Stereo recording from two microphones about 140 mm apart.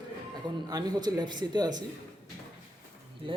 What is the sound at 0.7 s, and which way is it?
A man's voice, 30° right (ahead or behind).